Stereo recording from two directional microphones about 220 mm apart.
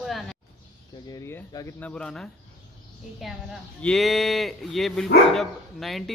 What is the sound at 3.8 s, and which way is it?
Speech, centre (ahead or behind).